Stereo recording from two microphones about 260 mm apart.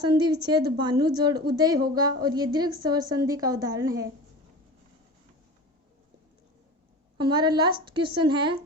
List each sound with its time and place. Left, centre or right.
0.0 s a woman's voice: centre
7.2 s a woman's voice: centre